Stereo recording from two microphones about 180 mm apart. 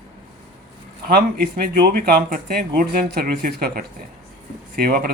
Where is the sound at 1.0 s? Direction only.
55° right (ahead or behind).